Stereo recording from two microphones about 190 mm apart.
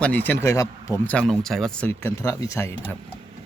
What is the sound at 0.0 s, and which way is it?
Speech, 10° left (ahead or behind).